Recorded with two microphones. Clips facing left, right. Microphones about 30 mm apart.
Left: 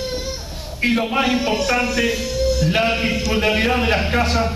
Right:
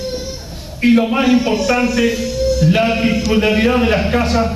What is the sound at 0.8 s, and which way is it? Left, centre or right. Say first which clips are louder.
A man's voice: right 5 dB; centre.